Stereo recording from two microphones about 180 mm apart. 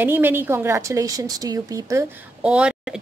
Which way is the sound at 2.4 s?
5° right (ahead or behind).